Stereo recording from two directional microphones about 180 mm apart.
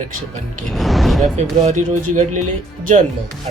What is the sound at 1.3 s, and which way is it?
Speech, 40° right (ahead or behind).